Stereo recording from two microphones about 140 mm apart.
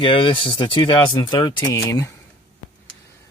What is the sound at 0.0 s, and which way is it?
Speech, 35° left (ahead or behind).